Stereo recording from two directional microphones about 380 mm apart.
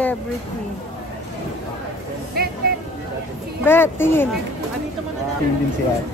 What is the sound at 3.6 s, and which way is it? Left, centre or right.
Speech, centre.